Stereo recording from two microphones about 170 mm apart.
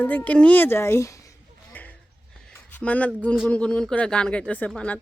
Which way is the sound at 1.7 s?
10° left (ahead or behind).